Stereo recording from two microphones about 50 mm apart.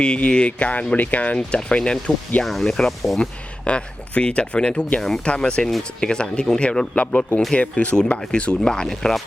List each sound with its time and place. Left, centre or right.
0.0 s speech: centre
1.4 s speech: centre
2.4 s speech: centre
3.2 s speech: left